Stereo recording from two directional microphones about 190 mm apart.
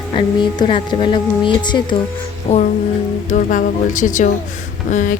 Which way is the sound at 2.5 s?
35° left (ahead or behind).